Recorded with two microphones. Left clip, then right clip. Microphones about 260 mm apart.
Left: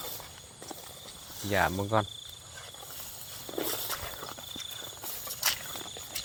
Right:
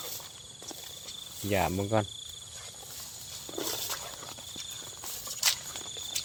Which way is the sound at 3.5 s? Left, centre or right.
Left.